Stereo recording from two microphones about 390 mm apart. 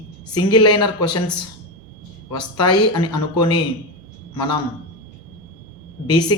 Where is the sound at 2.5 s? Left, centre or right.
Left.